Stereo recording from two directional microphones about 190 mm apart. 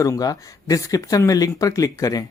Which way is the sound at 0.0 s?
20° left (ahead or behind).